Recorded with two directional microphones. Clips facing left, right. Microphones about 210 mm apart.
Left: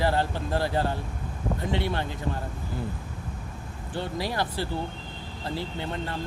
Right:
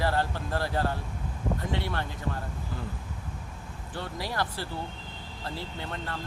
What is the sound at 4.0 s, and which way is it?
Speech, 25° left (ahead or behind).